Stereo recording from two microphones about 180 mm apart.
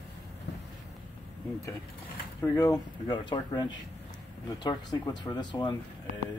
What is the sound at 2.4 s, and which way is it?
Speech, 20° left (ahead or behind).